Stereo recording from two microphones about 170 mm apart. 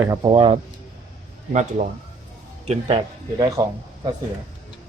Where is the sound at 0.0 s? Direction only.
25° right (ahead or behind).